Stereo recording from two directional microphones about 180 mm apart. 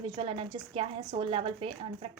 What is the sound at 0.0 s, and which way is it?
A woman's voice, 30° right (ahead or behind).